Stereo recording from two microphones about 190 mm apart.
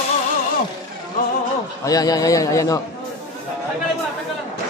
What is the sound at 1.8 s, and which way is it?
Speech, 20° left (ahead or behind).